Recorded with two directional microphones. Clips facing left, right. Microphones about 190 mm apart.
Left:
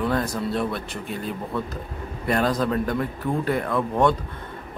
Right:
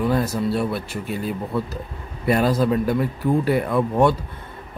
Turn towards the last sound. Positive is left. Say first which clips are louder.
# right 3 dB
turn(degrees=-10)  # may be behind; listen again after turning